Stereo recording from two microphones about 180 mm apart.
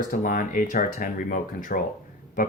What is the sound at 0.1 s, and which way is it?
Speech, 50° left (ahead or behind).